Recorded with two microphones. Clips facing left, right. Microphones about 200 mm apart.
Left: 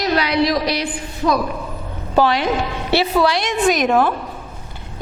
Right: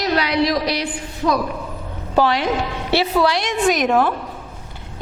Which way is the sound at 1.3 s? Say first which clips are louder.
Left 1 dB; 30° left (ahead or behind).